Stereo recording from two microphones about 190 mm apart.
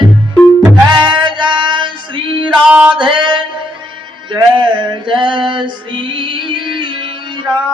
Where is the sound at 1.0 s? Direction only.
25° right (ahead or behind).